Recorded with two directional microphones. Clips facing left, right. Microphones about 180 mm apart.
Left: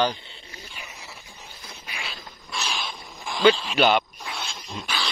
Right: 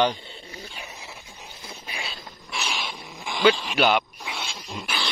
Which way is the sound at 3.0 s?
Centre (ahead or behind).